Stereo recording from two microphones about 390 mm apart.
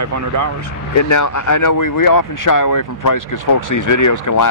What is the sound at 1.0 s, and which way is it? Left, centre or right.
Speech, left.